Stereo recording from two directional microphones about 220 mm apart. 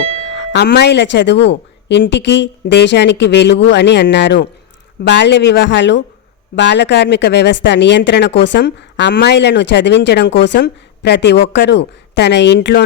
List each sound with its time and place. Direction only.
0.3 s speech: 50° left (ahead or behind)